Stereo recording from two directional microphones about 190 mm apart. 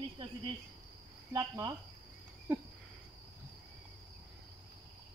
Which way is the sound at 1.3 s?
20° right (ahead or behind).